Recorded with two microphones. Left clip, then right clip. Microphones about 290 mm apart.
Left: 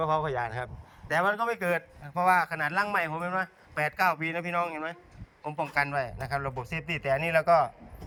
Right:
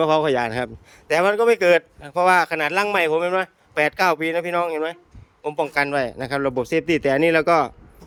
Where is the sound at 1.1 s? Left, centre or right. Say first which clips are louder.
Right 10 dB; right.